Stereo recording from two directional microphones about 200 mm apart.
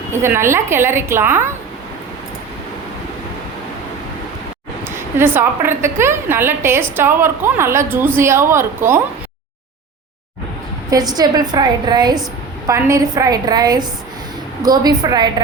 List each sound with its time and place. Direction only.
0.1 s a woman's voice: 10° right (ahead or behind)
4.9 s a woman's voice: 10° right (ahead or behind)
10.9 s a woman's voice: 20° right (ahead or behind)